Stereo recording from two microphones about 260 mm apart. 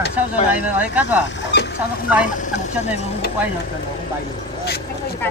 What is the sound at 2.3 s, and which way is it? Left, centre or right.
Speech, left.